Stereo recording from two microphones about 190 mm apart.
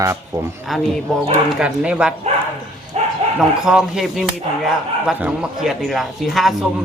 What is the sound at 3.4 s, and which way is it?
Speech, 5° right (ahead or behind).